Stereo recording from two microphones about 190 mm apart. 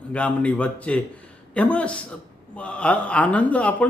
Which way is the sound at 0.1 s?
5° left (ahead or behind).